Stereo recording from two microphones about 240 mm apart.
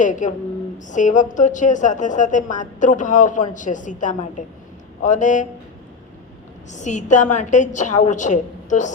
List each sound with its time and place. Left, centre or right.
0.0 s a woman's voice: left
6.7 s a woman's voice: left